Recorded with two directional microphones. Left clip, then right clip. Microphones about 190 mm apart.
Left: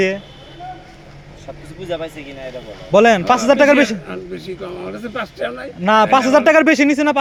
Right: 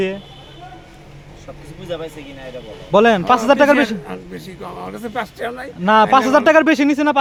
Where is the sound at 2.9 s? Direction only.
10° right (ahead or behind).